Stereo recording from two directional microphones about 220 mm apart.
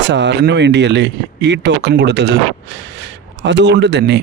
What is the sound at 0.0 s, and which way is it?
Speech, 50° right (ahead or behind).